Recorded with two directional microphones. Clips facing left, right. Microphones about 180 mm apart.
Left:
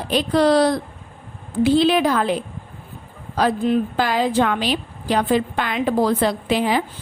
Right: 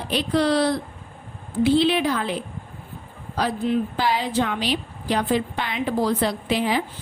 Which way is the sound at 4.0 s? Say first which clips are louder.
Left 4 dB; 50° left (ahead or behind).